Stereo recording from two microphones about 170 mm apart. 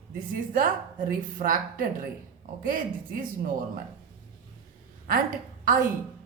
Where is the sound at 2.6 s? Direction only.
55° right (ahead or behind).